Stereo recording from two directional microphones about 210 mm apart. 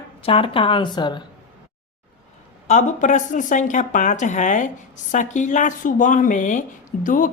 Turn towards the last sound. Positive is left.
turn(degrees=40)  # may be behind; listen again after turning